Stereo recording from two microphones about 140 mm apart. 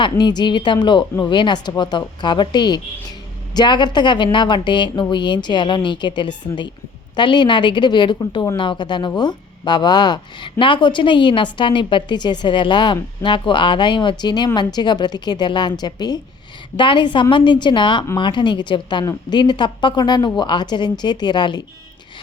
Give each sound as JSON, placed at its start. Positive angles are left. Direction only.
{"t": 0.0, "sound": "speech", "side_deg": 30}